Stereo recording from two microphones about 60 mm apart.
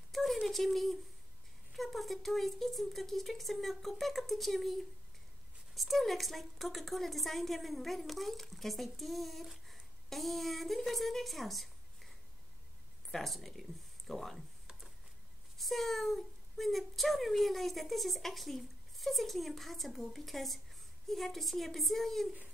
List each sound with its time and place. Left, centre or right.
0.1 s a sound: centre
1.8 s a woman's voice: centre
5.8 s a woman's voice: centre
13.1 s speech: centre
15.5 s a woman's voice: centre